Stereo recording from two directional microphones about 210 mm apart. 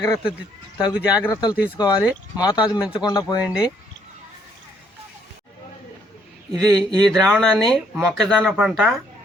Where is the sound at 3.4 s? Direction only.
5° right (ahead or behind).